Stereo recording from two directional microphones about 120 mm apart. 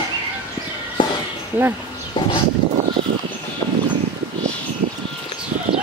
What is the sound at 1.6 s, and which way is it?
Speech, 15° right (ahead or behind).